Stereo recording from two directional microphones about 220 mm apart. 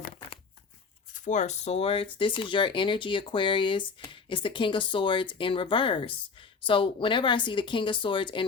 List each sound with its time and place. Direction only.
1.1 s speech: 35° left (ahead or behind)